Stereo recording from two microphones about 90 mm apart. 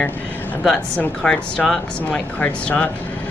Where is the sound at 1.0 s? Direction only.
10° left (ahead or behind).